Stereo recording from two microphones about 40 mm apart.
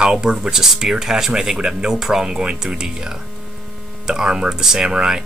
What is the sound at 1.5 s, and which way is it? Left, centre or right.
Speech, right.